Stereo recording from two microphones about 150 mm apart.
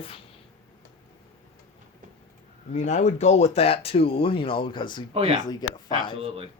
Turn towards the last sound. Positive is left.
turn(degrees=-40)  # may be behind; listen again after turning